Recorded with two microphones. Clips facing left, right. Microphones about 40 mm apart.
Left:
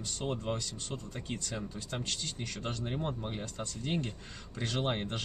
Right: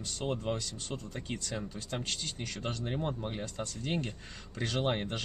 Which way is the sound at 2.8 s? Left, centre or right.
Centre.